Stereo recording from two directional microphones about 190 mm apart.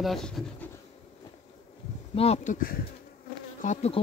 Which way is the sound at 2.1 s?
35° left (ahead or behind).